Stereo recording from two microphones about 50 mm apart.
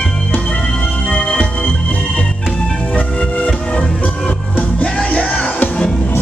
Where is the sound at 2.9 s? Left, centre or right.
Left.